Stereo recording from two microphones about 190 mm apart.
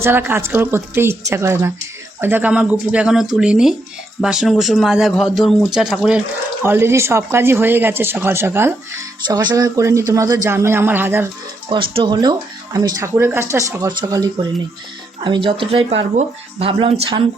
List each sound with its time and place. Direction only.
0.0 s speech: 10° right (ahead or behind)
9.2 s speech: 20° right (ahead or behind)
11.7 s speech: 25° right (ahead or behind)